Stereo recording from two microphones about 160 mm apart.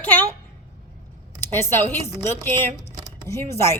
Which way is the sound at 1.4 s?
15° left (ahead or behind).